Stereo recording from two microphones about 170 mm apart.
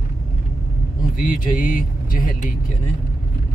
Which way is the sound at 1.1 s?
50° left (ahead or behind).